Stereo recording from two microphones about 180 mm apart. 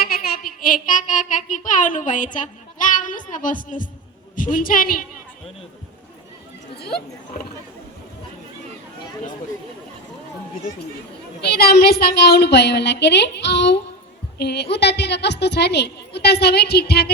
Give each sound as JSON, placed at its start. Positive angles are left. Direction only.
{"t": 0.0, "sound": "child singing", "side_deg": 55}
{"t": 4.4, "sound": "a woman's voice", "side_deg": 50}
{"t": 6.7, "sound": "speech", "side_deg": 60}
{"t": 11.4, "sound": "a woman's voice", "side_deg": 60}